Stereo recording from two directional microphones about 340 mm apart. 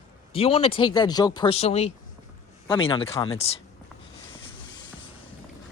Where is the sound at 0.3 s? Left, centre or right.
Centre.